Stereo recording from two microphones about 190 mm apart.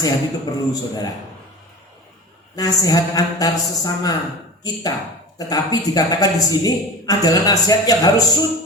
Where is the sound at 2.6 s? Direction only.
20° left (ahead or behind).